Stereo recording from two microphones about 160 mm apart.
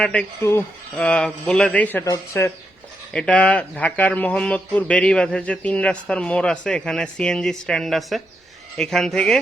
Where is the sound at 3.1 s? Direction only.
5° left (ahead or behind).